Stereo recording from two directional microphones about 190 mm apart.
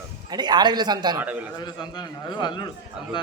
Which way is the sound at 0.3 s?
20° right (ahead or behind).